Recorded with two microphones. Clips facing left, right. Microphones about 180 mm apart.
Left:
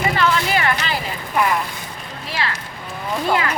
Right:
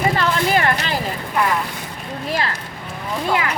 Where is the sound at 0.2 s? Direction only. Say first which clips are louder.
Right 1 dB; 45° right (ahead or behind).